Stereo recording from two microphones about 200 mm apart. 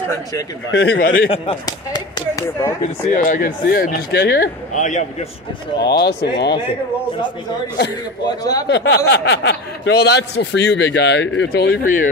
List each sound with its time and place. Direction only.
0.7 s speech: 60° left (ahead or behind)
1.3 s speech: 25° left (ahead or behind)
3.3 s speech: 45° left (ahead or behind)
4.7 s a man's voice: 40° left (ahead or behind)
5.8 s speech: 55° left (ahead or behind)
8.6 s speech: 60° left (ahead or behind)